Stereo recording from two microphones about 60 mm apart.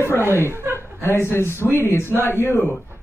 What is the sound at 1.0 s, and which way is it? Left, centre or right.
A man's voice, left.